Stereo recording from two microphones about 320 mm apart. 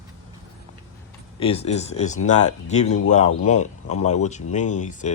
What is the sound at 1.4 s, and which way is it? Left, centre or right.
Speech, centre.